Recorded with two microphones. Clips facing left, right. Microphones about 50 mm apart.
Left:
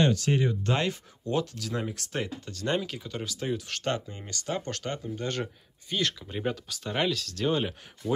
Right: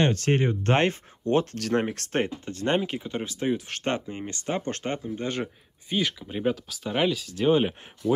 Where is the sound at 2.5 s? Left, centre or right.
Right.